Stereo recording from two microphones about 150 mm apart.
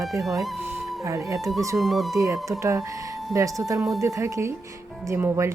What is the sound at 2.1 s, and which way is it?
Speech, 20° right (ahead or behind).